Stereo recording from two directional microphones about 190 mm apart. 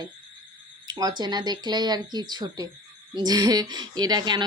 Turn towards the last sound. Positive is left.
turn(degrees=-25)  # may be behind; listen again after turning